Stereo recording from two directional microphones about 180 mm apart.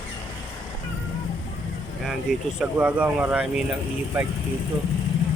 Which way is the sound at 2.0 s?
5° right (ahead or behind).